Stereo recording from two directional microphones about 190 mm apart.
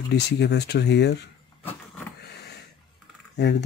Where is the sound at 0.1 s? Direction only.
60° left (ahead or behind).